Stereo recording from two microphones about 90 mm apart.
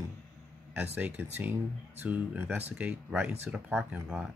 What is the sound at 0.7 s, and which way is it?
Speech, 20° right (ahead or behind).